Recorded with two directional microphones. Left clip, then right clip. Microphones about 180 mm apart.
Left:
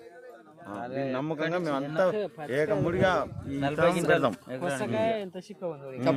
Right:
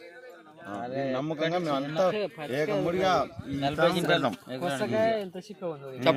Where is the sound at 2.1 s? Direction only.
50° right (ahead or behind).